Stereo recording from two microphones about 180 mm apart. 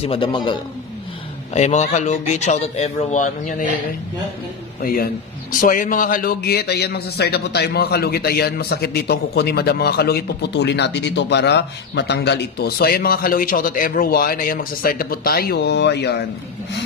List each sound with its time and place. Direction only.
0.0 s a man's voice: 30° left (ahead or behind)
1.5 s speech: 40° left (ahead or behind)
4.8 s a man's voice: 55° left (ahead or behind); by 16.3 s 70° left (ahead or behind)